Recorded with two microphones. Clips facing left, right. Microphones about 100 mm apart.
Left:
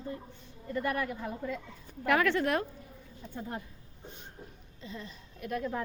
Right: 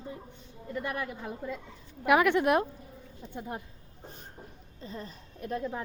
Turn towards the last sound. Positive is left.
turn(degrees=-35)  # may be behind; listen again after turning